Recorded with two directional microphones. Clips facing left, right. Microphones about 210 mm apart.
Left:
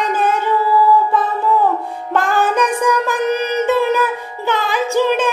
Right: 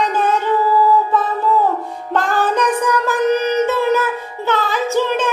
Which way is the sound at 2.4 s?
10° left (ahead or behind).